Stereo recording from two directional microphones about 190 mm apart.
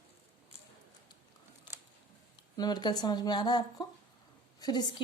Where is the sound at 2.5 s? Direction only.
20° left (ahead or behind).